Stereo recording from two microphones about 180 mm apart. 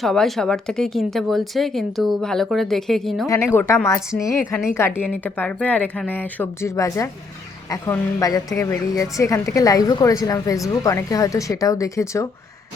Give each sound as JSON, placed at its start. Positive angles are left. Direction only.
{"t": 0.0, "sound": "a woman's voice", "side_deg": 0}